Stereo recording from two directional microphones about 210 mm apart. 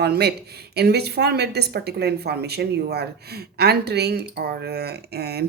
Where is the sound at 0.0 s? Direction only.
50° right (ahead or behind).